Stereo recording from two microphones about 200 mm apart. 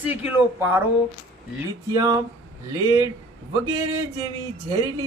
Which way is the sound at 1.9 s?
15° right (ahead or behind).